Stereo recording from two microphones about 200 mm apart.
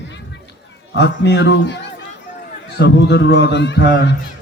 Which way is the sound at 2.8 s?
60° left (ahead or behind).